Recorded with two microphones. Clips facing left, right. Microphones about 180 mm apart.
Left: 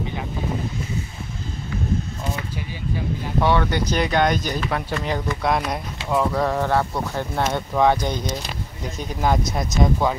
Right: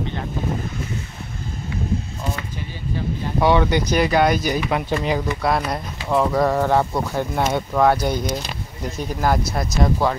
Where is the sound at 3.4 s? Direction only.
15° right (ahead or behind).